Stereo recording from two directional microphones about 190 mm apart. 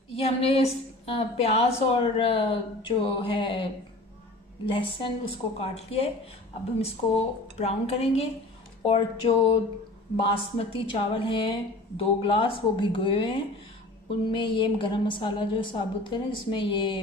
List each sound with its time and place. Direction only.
0.1 s a woman's voice: 30° left (ahead or behind)
4.6 s a woman's voice: 25° left (ahead or behind)
7.5 s a woman's voice: 35° left (ahead or behind)